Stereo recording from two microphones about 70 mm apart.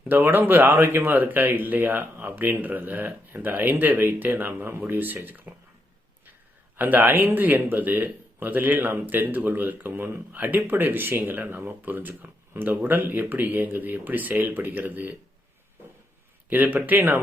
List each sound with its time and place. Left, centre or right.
0.1 s speech: right
6.7 s speech: right
16.5 s speech: right